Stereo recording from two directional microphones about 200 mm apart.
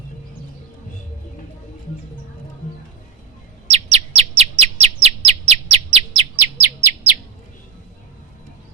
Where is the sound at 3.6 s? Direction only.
30° right (ahead or behind).